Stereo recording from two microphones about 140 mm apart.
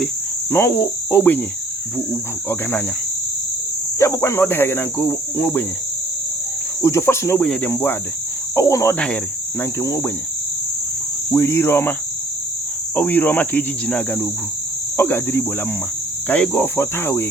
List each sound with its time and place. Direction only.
0.5 s cricket: 15° left (ahead or behind)
2.5 s cricket: 15° left (ahead or behind)
3.9 s cricket: 20° left (ahead or behind)
6.8 s cricket: 20° left (ahead or behind)
11.3 s cricket: 20° left (ahead or behind)
13.0 s cricket: 10° left (ahead or behind)